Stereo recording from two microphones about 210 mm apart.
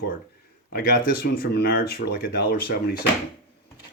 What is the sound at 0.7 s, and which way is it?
Speech, 45° left (ahead or behind).